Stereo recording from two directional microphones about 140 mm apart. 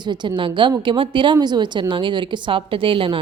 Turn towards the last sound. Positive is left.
turn(degrees=-40)  # may be behind; listen again after turning